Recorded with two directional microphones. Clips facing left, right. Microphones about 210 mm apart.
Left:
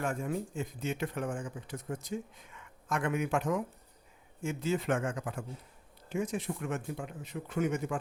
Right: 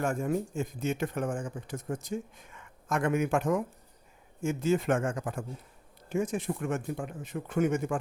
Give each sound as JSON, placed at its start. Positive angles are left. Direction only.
{"t": 0.0, "sound": "speech", "side_deg": -45}